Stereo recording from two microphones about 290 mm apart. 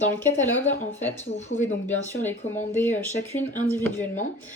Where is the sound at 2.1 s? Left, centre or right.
Centre.